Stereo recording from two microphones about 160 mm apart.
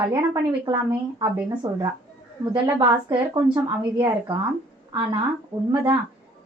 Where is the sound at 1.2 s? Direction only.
25° right (ahead or behind).